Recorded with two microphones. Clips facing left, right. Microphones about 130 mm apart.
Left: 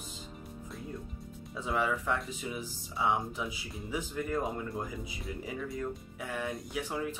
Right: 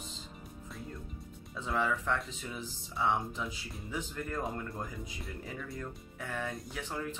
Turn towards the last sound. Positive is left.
turn(degrees=10)  # may be behind; listen again after turning